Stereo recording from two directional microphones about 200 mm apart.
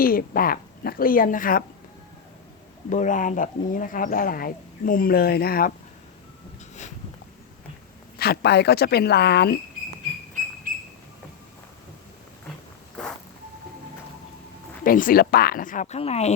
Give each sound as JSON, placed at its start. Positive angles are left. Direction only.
{"t": 0.0, "sound": "speech", "side_deg": 45}
{"t": 2.9, "sound": "speech", "side_deg": 40}
{"t": 8.2, "sound": "speech", "side_deg": 55}
{"t": 14.8, "sound": "speech", "side_deg": 45}